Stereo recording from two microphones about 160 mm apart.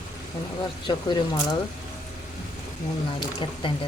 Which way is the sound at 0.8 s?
25° left (ahead or behind).